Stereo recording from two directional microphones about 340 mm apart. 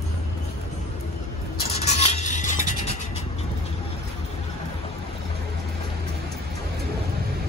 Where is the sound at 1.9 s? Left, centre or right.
Centre.